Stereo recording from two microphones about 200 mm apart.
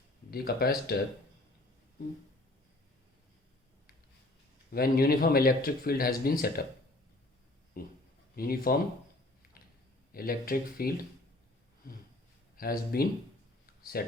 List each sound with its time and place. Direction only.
0.3 s speech: 50° left (ahead or behind)
4.7 s speech: 50° left (ahead or behind)
7.8 s speech: 45° left (ahead or behind)
10.1 s speech: 45° left (ahead or behind)
12.5 s speech: 45° left (ahead or behind)